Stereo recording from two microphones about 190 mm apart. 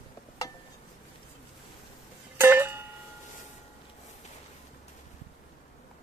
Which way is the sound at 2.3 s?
10° right (ahead or behind).